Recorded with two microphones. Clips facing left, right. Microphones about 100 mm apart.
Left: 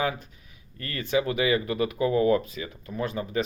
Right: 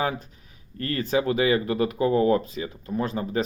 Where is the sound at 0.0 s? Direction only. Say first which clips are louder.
Right 1 dB; 35° right (ahead or behind).